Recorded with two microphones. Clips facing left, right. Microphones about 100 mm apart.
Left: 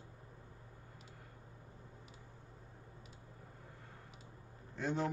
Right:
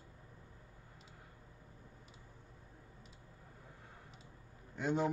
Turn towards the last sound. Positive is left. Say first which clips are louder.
# right 2 dB
turn(degrees=-15)  # may be behind; listen again after turning